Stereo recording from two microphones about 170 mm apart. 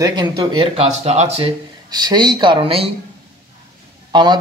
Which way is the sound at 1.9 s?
25° right (ahead or behind).